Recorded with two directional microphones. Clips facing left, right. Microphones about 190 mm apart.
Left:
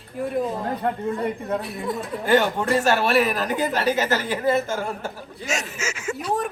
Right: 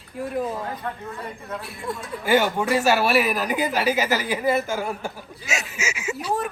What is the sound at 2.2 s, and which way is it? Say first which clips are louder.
Speech: even; 10° right (ahead or behind).